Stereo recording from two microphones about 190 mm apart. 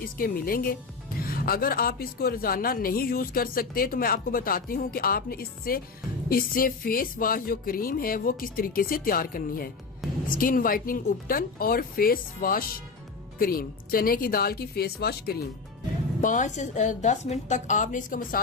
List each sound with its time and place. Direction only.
0.0 s a woman's voice: 50° left (ahead or behind)
16.2 s a woman's voice: 40° left (ahead or behind)